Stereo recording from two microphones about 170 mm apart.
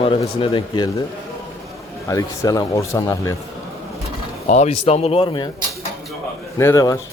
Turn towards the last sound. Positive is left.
turn(degrees=20)  # may be behind; listen again after turning